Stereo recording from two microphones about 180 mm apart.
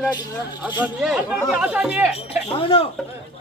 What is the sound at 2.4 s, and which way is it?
Chink, 30° left (ahead or behind).